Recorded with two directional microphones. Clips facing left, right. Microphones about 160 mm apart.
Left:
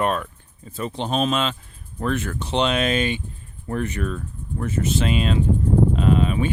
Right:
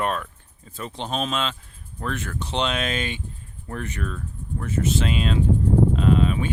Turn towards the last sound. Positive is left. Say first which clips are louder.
# left 1 dB
turn(degrees=5)  # may be behind; listen again after turning